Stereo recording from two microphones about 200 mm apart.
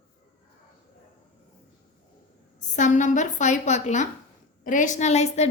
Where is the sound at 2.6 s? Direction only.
40° left (ahead or behind).